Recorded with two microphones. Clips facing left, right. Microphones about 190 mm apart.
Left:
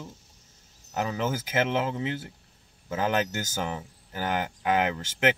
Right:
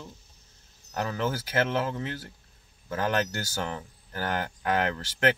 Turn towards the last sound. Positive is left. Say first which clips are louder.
# even
turn(degrees=15)  # may be behind; listen again after turning